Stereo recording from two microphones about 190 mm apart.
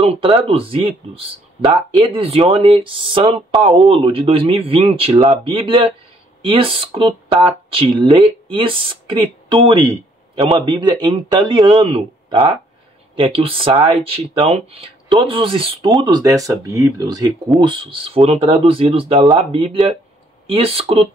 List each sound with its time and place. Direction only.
0.1 s speech: 30° right (ahead or behind)